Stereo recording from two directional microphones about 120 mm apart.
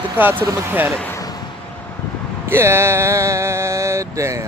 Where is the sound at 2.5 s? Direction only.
20° right (ahead or behind).